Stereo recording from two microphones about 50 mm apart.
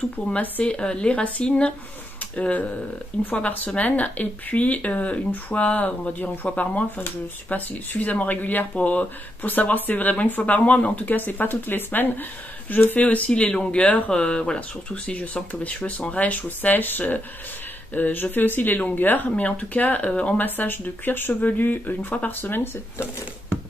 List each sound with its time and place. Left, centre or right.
0.3 s speech: left
16.6 s speech: left
19.3 s speech: left
20.1 s speech: left
20.3 s speech: left